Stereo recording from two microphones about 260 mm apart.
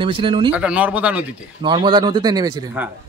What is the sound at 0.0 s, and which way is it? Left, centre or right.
Speech, centre.